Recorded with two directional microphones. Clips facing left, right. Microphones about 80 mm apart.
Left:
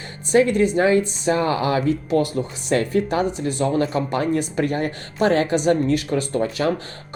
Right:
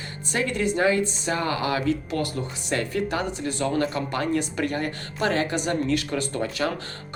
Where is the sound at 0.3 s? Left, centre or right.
Left.